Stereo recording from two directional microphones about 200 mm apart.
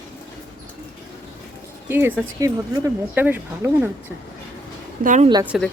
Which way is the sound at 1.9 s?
10° right (ahead or behind).